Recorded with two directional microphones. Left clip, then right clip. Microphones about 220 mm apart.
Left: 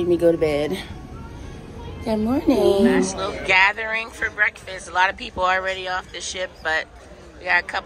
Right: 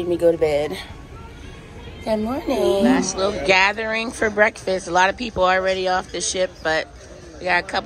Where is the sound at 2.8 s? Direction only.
15° right (ahead or behind).